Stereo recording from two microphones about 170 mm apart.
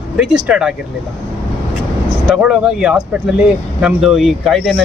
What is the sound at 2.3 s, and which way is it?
Speech, 5° right (ahead or behind).